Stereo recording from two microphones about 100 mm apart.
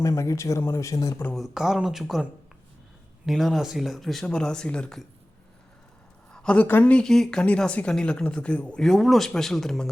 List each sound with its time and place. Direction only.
0.0 s speech: 30° left (ahead or behind)
1.4 s speech: 5° right (ahead or behind)
3.2 s speech: centre (ahead or behind)
6.3 s a woman's voice: 10° left (ahead or behind)